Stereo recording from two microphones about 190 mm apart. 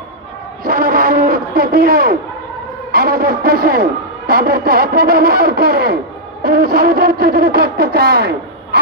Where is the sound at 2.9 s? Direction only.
50° right (ahead or behind).